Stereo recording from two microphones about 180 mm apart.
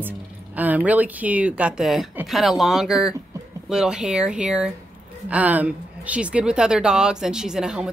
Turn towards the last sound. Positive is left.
turn(degrees=-5)  # may be behind; listen again after turning